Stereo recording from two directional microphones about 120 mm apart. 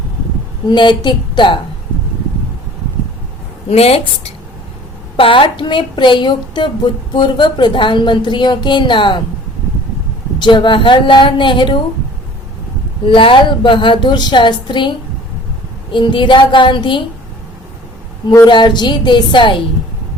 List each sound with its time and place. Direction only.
0.7 s a woman's voice: 40° left (ahead or behind)
3.7 s speech: 60° left (ahead or behind)
5.1 s a woman's voice: 45° left (ahead or behind)
10.4 s a woman's voice: 40° left (ahead or behind)
13.1 s a woman's voice: 45° left (ahead or behind)
18.4 s a woman's voice: 40° left (ahead or behind)